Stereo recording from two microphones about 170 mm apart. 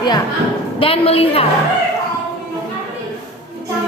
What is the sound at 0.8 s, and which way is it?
Speech, 35° left (ahead or behind).